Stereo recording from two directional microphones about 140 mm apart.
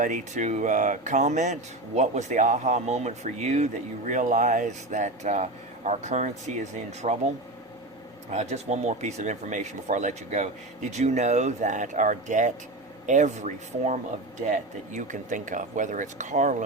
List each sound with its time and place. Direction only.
0.0 s speech: 65° right (ahead or behind)
8.3 s speech: 50° right (ahead or behind)